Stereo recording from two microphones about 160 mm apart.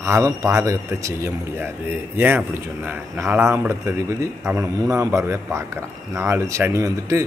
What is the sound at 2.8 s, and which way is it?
A man's voice, 15° right (ahead or behind).